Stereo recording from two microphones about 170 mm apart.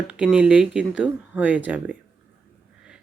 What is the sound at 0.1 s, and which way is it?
Speech, 5° right (ahead or behind).